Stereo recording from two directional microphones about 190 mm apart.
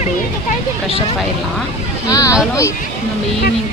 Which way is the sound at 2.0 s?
15° left (ahead or behind).